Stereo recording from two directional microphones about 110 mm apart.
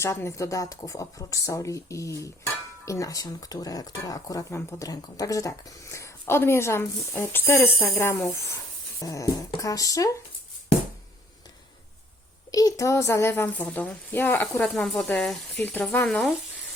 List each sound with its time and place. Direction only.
0.0 s speech: 25° left (ahead or behind)
9.0 s a sound: 30° left (ahead or behind)
12.5 s speech: 30° left (ahead or behind); by 15.4 s 5° left (ahead or behind)
15.5 s speech: 20° left (ahead or behind)
16.0 s speech: 5° left (ahead or behind)